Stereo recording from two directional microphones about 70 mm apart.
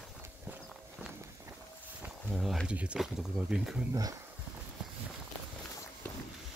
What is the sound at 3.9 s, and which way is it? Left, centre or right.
Speech, right.